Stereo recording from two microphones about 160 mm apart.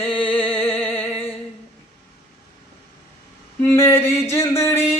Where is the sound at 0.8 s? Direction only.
15° left (ahead or behind).